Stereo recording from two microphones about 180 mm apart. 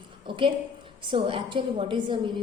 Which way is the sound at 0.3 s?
25° right (ahead or behind).